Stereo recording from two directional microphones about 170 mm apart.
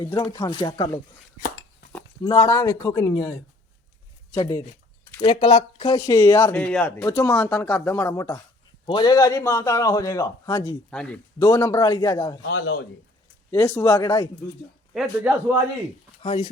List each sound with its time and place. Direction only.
0.0 s a man's voice: 20° left (ahead or behind)
2.2 s speech: 20° left (ahead or behind)
5.2 s a man's voice: 30° left (ahead or behind)
10.9 s speech: 5° left (ahead or behind)
11.3 s a man's voice: 15° left (ahead or behind)
12.4 s speech: 90° left
13.5 s speech: 15° left (ahead or behind)
15.0 s a man's voice: 10° right (ahead or behind)
16.2 s speech: 35° left (ahead or behind)